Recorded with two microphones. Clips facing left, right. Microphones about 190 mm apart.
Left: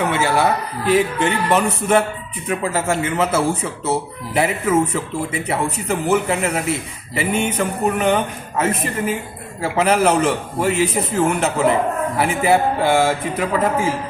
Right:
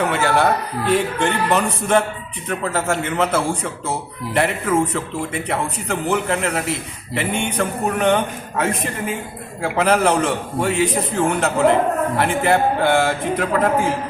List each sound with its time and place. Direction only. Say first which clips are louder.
0.0 s a man's voice: even; 5° left (ahead or behind)